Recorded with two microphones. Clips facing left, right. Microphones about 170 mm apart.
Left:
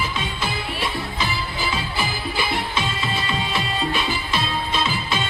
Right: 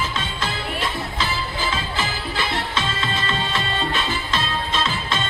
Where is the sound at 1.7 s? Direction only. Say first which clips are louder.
Even; 10° left (ahead or behind).